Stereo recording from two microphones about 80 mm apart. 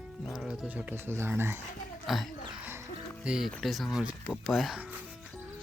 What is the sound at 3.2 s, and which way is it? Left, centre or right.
Speech, centre.